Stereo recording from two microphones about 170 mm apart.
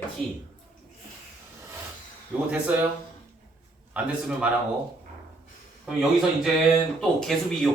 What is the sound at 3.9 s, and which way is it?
Speech, 5° right (ahead or behind).